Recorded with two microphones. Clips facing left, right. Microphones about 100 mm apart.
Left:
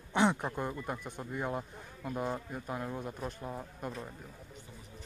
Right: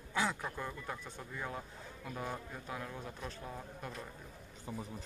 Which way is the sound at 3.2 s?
15° left (ahead or behind).